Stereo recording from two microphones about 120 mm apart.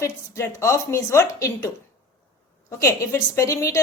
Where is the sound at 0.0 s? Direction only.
25° left (ahead or behind).